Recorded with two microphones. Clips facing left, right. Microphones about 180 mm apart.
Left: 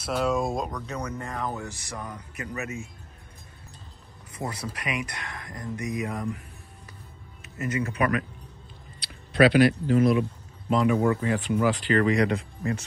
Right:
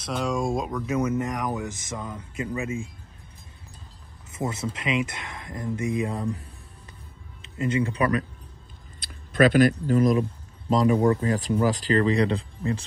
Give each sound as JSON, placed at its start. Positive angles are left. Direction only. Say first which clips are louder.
{"t": 0.0, "sound": "speech", "louder": "left 1 dB", "side_deg": 5}
{"t": 1.0, "sound": "speech", "louder": "right 6 dB", "side_deg": -20}
{"t": 4.3, "sound": "speech", "louder": "right 4 dB", "side_deg": -25}
{"t": 7.4, "sound": "speech", "louder": "right 4 dB", "side_deg": -25}
{"t": 9.0, "sound": "speech", "louder": "even", "side_deg": -45}